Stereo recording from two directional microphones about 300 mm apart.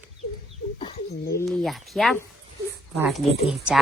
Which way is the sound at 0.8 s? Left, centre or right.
Centre.